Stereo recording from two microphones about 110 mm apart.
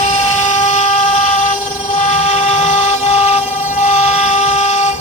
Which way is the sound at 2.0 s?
90° left.